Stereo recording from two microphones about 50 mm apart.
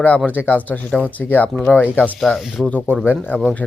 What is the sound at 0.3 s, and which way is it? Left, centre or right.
Speech, left.